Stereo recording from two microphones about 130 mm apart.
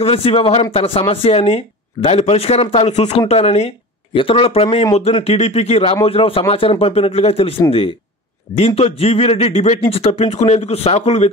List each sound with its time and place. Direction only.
0.0 s speech: 50° left (ahead or behind)